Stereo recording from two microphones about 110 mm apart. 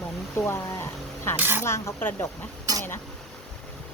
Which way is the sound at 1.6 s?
20° left (ahead or behind).